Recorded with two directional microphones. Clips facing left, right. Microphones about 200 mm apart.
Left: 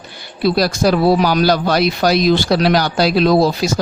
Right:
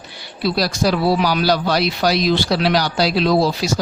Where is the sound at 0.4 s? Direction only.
50° left (ahead or behind).